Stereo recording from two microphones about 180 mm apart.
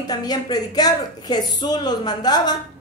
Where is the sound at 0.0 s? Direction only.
20° left (ahead or behind).